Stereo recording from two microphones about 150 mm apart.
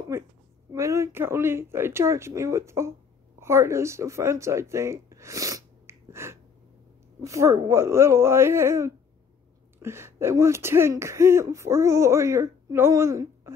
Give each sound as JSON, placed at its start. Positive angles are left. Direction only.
{"t": 0.1, "sound": "speech", "side_deg": -15}